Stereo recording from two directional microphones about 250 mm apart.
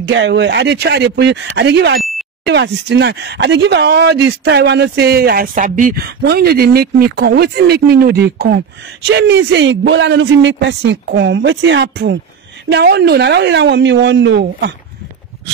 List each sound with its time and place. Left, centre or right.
0.0 s speech: right
2.0 s beep: centre
2.4 s speech: right